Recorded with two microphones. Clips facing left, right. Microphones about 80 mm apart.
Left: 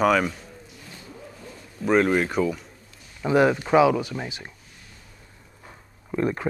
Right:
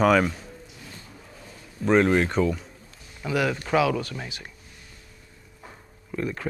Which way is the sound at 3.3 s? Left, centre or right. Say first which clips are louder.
Left 6 dB; left.